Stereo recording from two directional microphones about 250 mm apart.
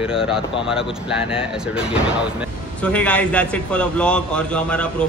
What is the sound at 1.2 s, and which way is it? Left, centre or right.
Speech, left.